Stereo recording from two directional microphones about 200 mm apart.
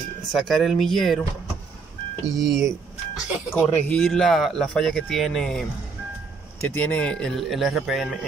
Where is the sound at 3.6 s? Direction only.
5° left (ahead or behind).